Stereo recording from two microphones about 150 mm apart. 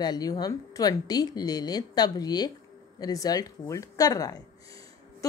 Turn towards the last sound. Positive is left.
turn(degrees=25)  # may be behind; listen again after turning